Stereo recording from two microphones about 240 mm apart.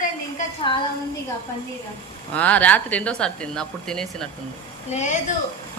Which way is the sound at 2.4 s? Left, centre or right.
Centre.